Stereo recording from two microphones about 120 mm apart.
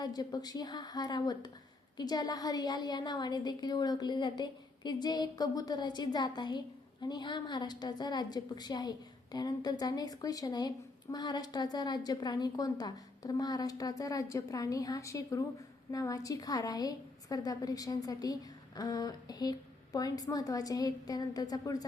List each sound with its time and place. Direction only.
0.0 s a woman's voice: 35° left (ahead or behind)